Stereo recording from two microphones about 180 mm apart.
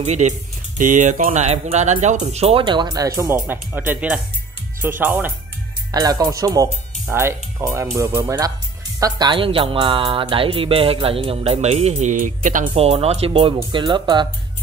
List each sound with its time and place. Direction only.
0.0 s a woman's voice: 40° right (ahead or behind); by 5.3 s 10° right (ahead or behind)
5.9 s a woman's voice: 20° right (ahead or behind); by 12.6 s 45° right (ahead or behind)
12.7 s a woman's voice: 35° right (ahead or behind)